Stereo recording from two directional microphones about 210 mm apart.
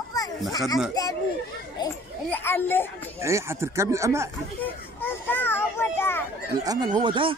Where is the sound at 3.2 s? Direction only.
15° right (ahead or behind).